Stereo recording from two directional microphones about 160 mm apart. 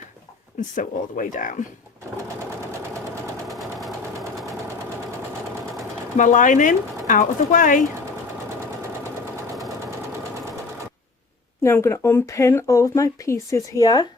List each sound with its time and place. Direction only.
0.8 s speech: 55° left (ahead or behind)
3.5 s engine: centre (ahead or behind)
6.1 s speech: 50° left (ahead or behind)
11.6 s speech: 15° left (ahead or behind)